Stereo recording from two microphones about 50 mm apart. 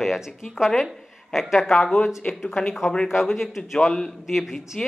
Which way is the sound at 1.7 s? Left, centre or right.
Centre.